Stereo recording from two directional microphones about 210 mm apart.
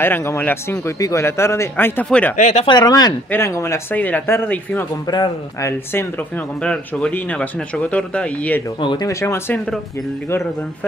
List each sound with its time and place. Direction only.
0.0 s speech: 10° left (ahead or behind)
2.3 s speech: 35° left (ahead or behind); by 8.6 s 5° left (ahead or behind)
8.7 s speech: 20° left (ahead or behind)